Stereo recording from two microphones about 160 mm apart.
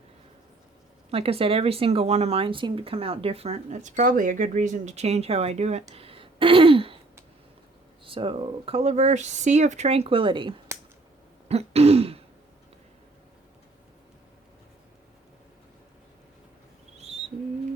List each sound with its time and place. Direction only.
1.1 s speech: 35° right (ahead or behind)
5.9 s throat clearing: 35° right (ahead or behind)
8.0 s speech: 35° right (ahead or behind)
11.4 s throat clearing: 40° right (ahead or behind)